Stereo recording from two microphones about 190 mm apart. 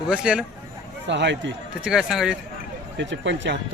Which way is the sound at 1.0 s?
70° right (ahead or behind).